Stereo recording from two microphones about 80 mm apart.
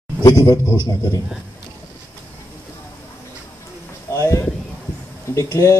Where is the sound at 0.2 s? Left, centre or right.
Left.